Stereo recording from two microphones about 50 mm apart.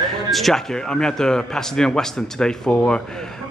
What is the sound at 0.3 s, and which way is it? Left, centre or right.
A man's voice, centre.